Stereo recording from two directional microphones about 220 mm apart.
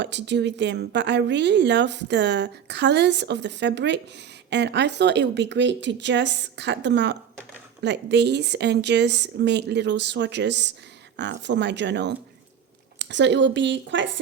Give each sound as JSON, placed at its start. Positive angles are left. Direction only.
{"t": 0.0, "sound": "speech", "side_deg": -55}